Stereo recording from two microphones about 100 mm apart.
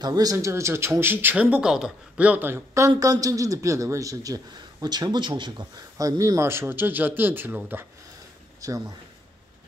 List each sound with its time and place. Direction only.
0.0 s a man's voice: 40° right (ahead or behind); by 1.3 s 20° right (ahead or behind)
1.3 s speech: 10° right (ahead or behind)
3.0 s a man's voice: 35° right (ahead or behind)
4.8 s a man's voice: 45° right (ahead or behind); by 7.8 s 20° right (ahead or behind)
8.5 s speech: 35° right (ahead or behind)